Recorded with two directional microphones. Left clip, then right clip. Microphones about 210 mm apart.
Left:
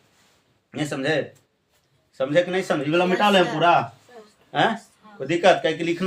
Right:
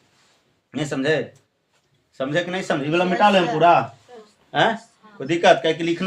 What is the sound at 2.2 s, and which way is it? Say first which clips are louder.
Speech: left 3 dB; 20° right (ahead or behind).